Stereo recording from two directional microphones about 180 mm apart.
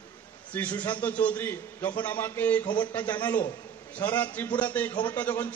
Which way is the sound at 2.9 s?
10° left (ahead or behind).